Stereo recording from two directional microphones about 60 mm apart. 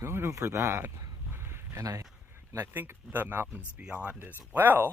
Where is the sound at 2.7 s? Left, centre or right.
Right.